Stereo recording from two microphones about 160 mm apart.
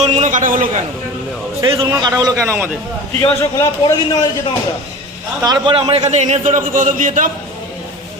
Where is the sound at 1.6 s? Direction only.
25° right (ahead or behind).